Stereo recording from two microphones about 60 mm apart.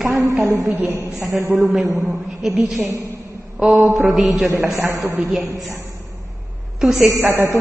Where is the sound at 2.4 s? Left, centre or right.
Centre.